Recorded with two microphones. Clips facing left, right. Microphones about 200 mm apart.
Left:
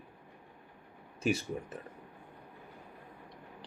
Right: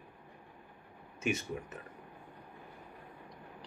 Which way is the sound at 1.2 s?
35° left (ahead or behind).